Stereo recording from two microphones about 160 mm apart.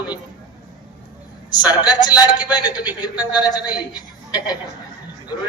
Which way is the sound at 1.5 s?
25° left (ahead or behind).